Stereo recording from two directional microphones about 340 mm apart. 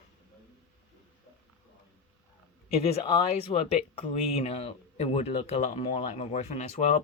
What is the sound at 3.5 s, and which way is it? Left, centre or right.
Speech, centre.